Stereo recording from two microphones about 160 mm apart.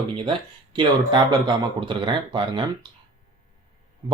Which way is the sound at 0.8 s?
30° right (ahead or behind).